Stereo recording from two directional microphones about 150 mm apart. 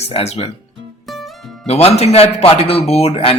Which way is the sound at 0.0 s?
45° left (ahead or behind).